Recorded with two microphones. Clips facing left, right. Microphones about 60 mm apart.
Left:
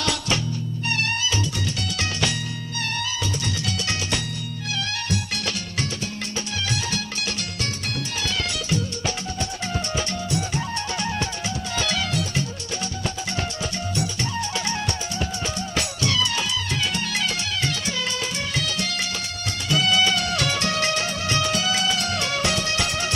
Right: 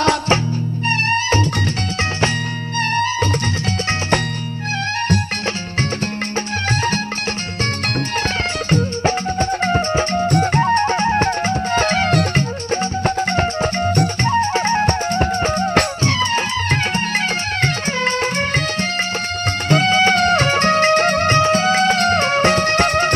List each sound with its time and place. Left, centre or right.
0.0 s music: right
8.6 s music: right
17.6 s music: right
19.7 s music: right